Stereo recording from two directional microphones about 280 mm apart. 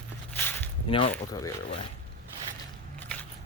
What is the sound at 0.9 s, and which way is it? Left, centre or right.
Speech, centre.